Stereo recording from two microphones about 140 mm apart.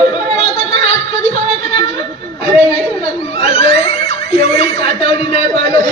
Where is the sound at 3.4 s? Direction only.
45° left (ahead or behind).